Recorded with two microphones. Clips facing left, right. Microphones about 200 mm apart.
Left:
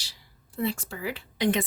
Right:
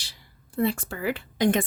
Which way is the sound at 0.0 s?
55° right (ahead or behind).